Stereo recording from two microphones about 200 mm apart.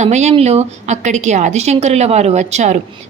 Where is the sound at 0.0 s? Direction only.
35° right (ahead or behind).